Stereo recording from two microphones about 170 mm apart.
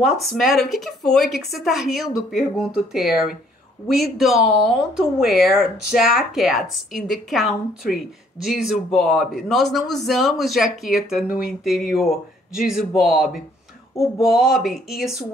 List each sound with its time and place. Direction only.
0.0 s a man's voice: centre (ahead or behind)
5.9 s speech: 60° left (ahead or behind)
6.1 s a man's voice: centre (ahead or behind)